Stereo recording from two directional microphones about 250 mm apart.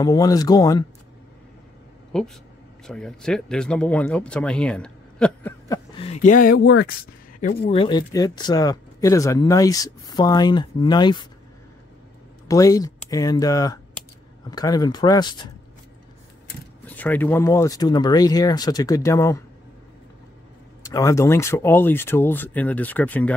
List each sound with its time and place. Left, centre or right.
0.0 s speech: centre
2.1 s speech: centre
5.9 s speech: left
12.4 s speech: centre
16.8 s speech: centre
20.8 s speech: centre